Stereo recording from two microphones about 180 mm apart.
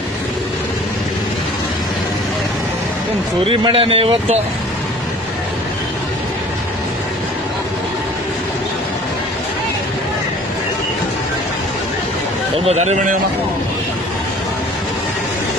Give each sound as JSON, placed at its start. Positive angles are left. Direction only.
{"t": 3.4, "sound": "a man's voice", "side_deg": -30}
{"t": 12.6, "sound": "a man's voice", "side_deg": -40}